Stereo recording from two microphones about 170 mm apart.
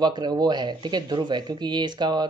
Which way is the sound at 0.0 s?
25° right (ahead or behind).